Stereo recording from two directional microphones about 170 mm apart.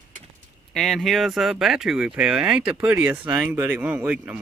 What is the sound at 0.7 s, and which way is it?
Speech, centre (ahead or behind).